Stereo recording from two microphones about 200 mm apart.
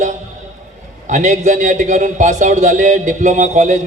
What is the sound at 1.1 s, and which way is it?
A man's voice, 40° right (ahead or behind).